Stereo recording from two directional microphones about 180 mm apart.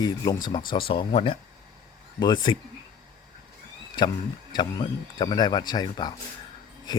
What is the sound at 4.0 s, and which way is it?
Speech, 25° left (ahead or behind).